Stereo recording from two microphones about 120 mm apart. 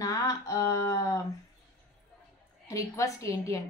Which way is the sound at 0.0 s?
30° left (ahead or behind).